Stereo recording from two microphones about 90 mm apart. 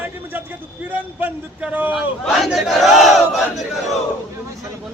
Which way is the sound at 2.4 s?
Centre (ahead or behind).